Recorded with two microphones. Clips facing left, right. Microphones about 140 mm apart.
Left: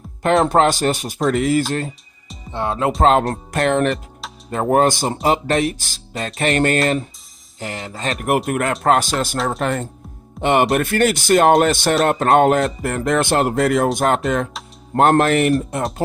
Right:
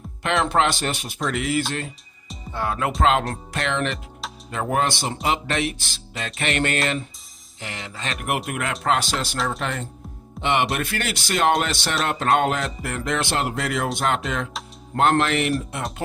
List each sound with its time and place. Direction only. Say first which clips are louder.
0.4 s music: left 6 dB; 40° left (ahead or behind)
2.5 s speech: left 5 dB; 25° left (ahead or behind)
3.0 s speech: left 5 dB; 40° left (ahead or behind)
4.5 s music: left 8 dB; 40° left (ahead or behind)
8.4 s speech: left 5 dB; 45° left (ahead or behind)